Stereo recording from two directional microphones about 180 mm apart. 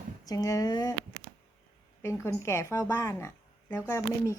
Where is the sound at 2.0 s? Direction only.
15° left (ahead or behind).